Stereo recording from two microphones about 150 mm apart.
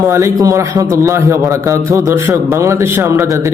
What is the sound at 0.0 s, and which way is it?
A man's voice, 20° right (ahead or behind).